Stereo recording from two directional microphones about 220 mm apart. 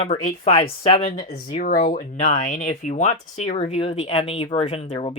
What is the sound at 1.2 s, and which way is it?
Speech, 40° left (ahead or behind).